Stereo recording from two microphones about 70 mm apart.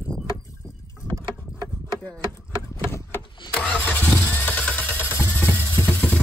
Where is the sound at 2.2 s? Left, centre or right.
Left.